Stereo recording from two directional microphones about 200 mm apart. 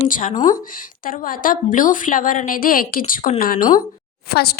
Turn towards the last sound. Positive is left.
turn(degrees=50)  # may be behind; listen again after turning